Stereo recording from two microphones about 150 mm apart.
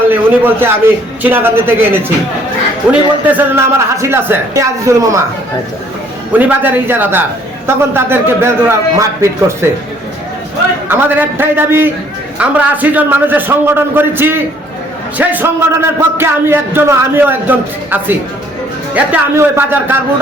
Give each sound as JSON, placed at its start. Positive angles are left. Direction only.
{"t": 0.1, "sound": "a man's voice", "side_deg": -15}
{"t": 6.3, "sound": "speech", "side_deg": -10}
{"t": 10.8, "sound": "speech", "side_deg": -15}